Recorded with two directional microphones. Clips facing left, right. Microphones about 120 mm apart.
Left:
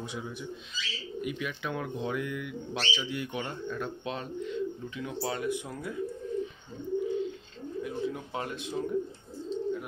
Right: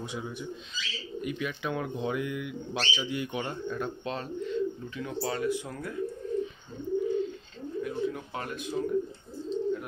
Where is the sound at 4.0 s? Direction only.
10° left (ahead or behind).